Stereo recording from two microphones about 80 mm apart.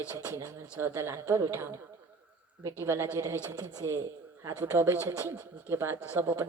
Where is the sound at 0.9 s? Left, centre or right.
Right.